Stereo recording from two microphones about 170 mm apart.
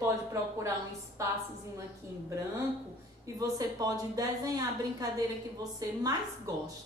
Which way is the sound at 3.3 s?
20° right (ahead or behind).